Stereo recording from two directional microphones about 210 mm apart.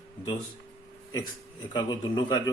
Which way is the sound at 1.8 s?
20° left (ahead or behind).